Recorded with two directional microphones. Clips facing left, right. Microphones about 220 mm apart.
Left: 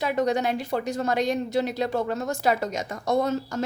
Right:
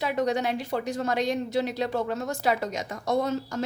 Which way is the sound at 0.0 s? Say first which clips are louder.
Left 2 dB; 45° left (ahead or behind).